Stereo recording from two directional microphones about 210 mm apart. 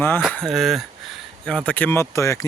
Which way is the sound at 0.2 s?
Centre (ahead or behind).